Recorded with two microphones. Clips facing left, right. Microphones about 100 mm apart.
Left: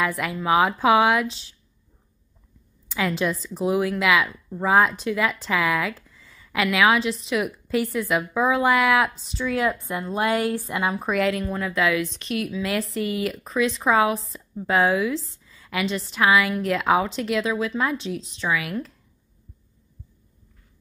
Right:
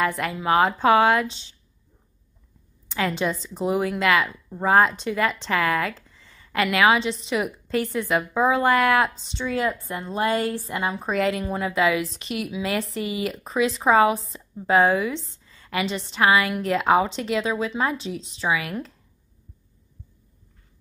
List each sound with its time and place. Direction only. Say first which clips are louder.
0.2 s a woman's voice: left 1 dB; 5° left (ahead or behind)
2.9 s speech: even; centre (ahead or behind)
9.7 s a woman's voice: left 2 dB; 15° left (ahead or behind)
11.1 s speech: right 2 dB; centre (ahead or behind)